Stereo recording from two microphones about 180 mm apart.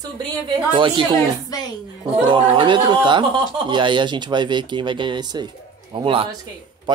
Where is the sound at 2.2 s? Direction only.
25° right (ahead or behind).